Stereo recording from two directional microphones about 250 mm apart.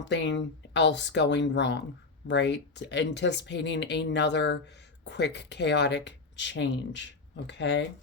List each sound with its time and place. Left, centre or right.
0.0 s speech: left